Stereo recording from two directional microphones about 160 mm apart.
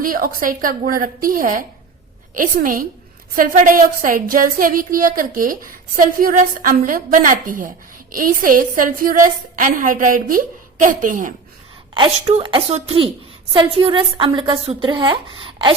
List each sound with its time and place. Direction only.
0.0 s speech: 60° right (ahead or behind)
11.9 s a woman's voice: 35° right (ahead or behind)